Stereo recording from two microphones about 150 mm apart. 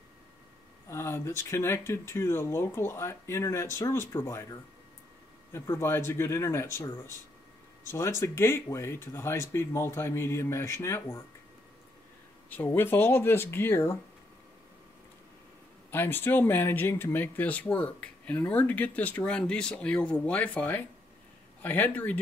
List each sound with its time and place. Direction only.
0.8 s speech: 15° left (ahead or behind)
12.7 s speech: 15° left (ahead or behind)
15.9 s speech: 15° left (ahead or behind)